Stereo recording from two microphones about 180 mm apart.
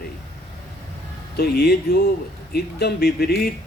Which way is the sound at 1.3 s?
60° left (ahead or behind).